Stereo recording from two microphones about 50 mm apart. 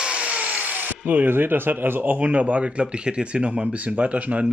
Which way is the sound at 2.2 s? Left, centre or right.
Right.